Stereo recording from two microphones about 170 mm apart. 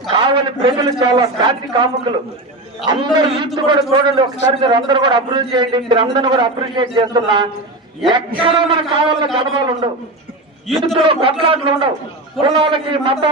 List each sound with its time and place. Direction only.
0.1 s a man's voice: 30° right (ahead or behind)
3.0 s a man's voice: 25° right (ahead or behind)
10.7 s a man's voice: centre (ahead or behind)
10.9 s a man's voice: 35° right (ahead or behind)